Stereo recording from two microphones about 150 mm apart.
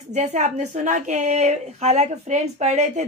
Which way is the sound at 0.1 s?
50° right (ahead or behind).